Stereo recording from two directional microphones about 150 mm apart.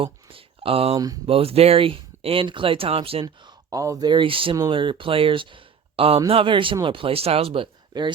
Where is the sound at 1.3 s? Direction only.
40° right (ahead or behind).